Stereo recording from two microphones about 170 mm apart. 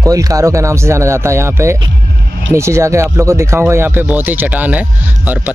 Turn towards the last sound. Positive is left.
turn(degrees=-10)  # may be behind; listen again after turning